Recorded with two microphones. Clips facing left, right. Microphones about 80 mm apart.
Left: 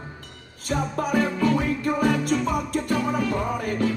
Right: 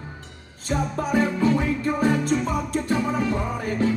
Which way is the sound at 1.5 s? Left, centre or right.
Left.